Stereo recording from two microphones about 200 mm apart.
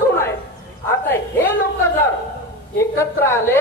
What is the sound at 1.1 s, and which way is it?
Speech, 10° left (ahead or behind).